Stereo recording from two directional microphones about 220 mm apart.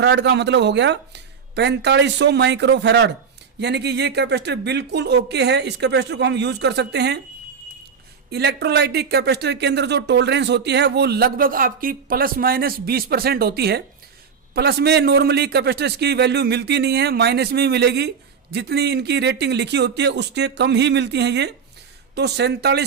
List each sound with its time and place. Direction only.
0.0 s speech: 50° right (ahead or behind)
8.3 s speech: 50° right (ahead or behind)